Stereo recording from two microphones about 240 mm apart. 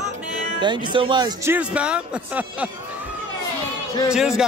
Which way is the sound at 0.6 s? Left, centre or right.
Centre.